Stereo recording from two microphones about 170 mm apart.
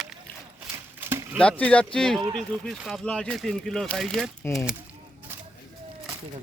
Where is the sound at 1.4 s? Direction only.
10° left (ahead or behind).